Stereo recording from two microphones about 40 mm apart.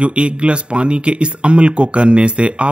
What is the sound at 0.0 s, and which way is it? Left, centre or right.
Speech, right.